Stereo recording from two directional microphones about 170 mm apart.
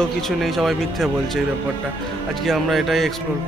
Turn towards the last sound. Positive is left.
turn(degrees=0)  # may be behind; listen again after turning